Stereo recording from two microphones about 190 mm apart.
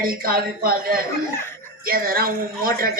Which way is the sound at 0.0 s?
50° right (ahead or behind).